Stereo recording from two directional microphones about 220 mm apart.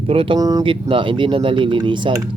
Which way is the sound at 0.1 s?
25° right (ahead or behind).